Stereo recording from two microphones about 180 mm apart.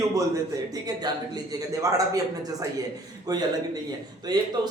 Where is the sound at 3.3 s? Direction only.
20° right (ahead or behind).